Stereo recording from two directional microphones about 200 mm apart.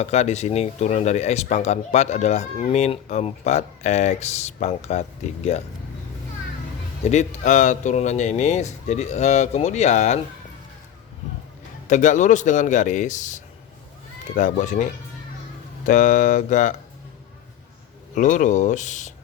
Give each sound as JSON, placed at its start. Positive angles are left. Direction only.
{"t": 0.0, "sound": "speech", "side_deg": 35}
{"t": 7.0, "sound": "speech", "side_deg": 35}
{"t": 11.9, "sound": "speech", "side_deg": 40}
{"t": 15.9, "sound": "speech", "side_deg": 40}
{"t": 18.1, "sound": "speech", "side_deg": 40}